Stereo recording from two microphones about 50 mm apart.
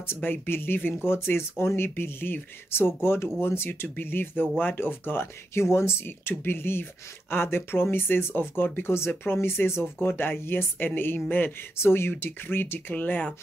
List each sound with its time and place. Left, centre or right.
0.0 s speech: left
11.8 s speech: left
12.9 s speech: left